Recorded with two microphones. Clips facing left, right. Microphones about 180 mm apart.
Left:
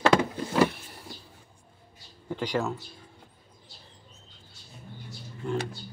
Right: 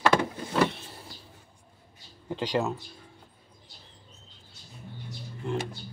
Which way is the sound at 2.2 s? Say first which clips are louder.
Right 1 dB; 20° right (ahead or behind).